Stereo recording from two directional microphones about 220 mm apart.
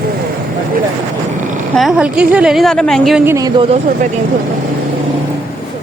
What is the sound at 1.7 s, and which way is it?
A woman's voice, centre (ahead or behind).